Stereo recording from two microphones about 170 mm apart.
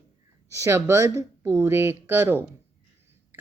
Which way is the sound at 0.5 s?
15° right (ahead or behind).